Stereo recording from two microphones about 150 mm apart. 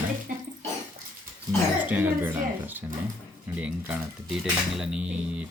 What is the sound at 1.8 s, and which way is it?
Speech, 10° right (ahead or behind).